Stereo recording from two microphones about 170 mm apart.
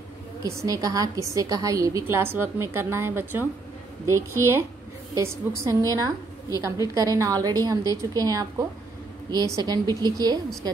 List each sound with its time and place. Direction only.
0.4 s a woman's voice: 20° right (ahead or behind)